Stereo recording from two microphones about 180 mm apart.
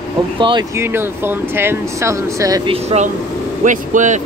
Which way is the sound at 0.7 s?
15° right (ahead or behind).